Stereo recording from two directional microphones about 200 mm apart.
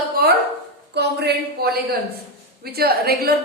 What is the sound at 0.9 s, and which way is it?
A woman's voice, 55° right (ahead or behind).